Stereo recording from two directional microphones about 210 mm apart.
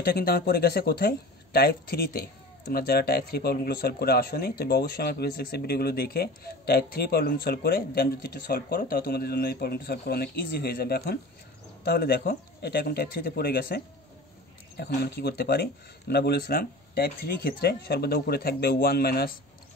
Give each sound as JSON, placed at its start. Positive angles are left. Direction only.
{"t": 0.0, "sound": "speech", "side_deg": 45}
{"t": 15.0, "sound": "speech", "side_deg": 50}